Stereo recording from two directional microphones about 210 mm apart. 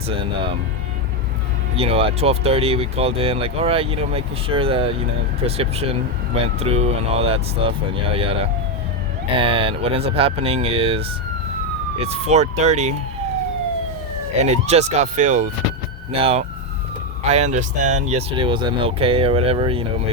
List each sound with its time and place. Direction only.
0.1 s speech: 25° right (ahead or behind)
1.7 s speech: 25° right (ahead or behind)
14.4 s speech: 30° right (ahead or behind)
18.1 s speech: 25° right (ahead or behind)